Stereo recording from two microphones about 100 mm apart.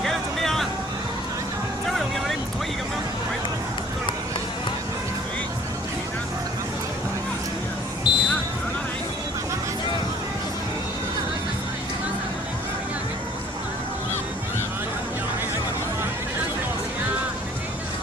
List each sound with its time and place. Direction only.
0.0 s vehicle: 5° left (ahead or behind)
8.1 s basketball bounce: 50° left (ahead or behind)